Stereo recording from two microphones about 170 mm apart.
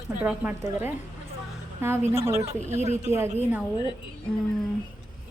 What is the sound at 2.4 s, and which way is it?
Speech, 40° right (ahead or behind).